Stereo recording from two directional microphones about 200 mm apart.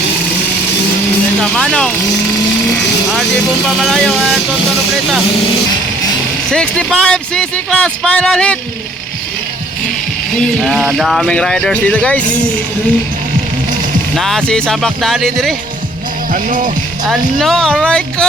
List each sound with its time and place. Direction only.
1.4 s speech: 5° left (ahead or behind)
3.8 s speech: centre (ahead or behind)
6.5 s speech: 5° left (ahead or behind)
10.6 s speech: centre (ahead or behind)
14.2 s speech: centre (ahead or behind)
16.3 s music: 40° right (ahead or behind)
17.4 s speech: 5° left (ahead or behind)